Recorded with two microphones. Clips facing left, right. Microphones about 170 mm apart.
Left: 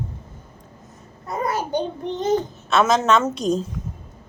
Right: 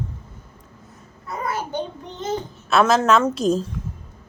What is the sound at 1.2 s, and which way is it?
Babbling, 40° left (ahead or behind).